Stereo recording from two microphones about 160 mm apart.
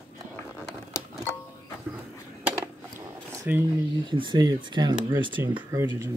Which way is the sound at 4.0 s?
30° right (ahead or behind).